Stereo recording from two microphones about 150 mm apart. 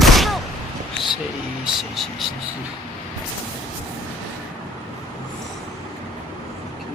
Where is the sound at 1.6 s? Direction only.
Centre (ahead or behind).